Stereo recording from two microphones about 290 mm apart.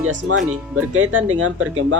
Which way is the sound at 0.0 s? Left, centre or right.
Right.